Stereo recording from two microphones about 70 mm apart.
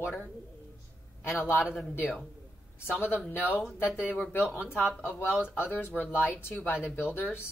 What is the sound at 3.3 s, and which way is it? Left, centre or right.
Speech, left.